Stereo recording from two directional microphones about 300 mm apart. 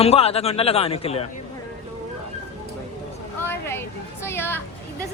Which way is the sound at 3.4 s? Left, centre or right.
Centre.